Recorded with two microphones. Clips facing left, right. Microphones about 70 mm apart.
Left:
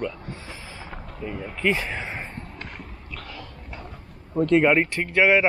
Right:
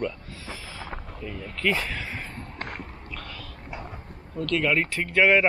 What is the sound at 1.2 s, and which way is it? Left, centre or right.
A man's voice, centre.